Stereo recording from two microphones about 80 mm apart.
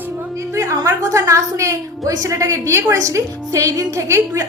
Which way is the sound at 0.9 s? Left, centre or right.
Right.